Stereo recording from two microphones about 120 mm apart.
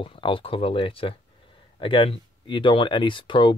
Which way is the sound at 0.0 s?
45° left (ahead or behind).